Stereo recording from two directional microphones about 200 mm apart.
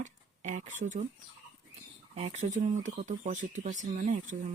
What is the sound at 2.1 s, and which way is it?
Speech, 35° right (ahead or behind).